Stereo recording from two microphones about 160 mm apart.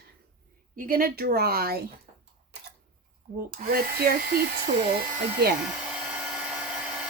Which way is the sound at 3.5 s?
70° right (ahead or behind).